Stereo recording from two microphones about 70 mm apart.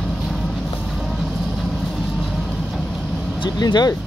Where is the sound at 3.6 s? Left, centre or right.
Left.